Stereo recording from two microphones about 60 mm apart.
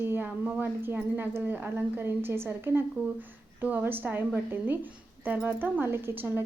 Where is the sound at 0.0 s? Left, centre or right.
Right.